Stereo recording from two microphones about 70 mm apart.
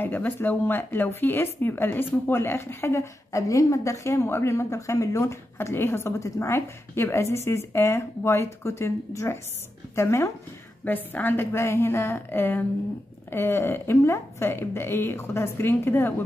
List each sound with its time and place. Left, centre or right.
0.0 s speech: left
10.9 s speech: left